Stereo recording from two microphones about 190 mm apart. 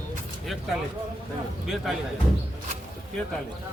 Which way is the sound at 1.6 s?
Centre (ahead or behind).